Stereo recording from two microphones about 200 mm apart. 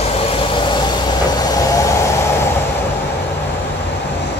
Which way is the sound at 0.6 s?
20° left (ahead or behind).